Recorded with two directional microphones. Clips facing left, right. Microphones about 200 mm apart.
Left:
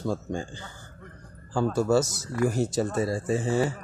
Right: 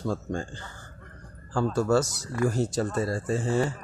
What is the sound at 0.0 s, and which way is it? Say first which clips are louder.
Speech: even; 10° left (ahead or behind).